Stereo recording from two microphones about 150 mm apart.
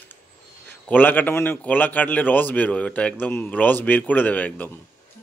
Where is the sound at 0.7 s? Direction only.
10° left (ahead or behind).